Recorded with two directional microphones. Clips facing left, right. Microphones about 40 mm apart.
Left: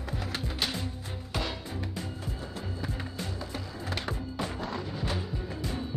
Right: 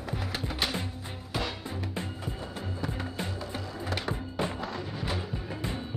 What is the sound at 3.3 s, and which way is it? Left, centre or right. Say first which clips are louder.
Music: right 1 dB; centre.